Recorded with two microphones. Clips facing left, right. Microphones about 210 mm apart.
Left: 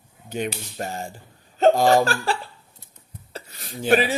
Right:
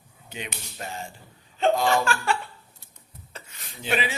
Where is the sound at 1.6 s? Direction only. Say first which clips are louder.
Left 6 dB; 40° left (ahead or behind).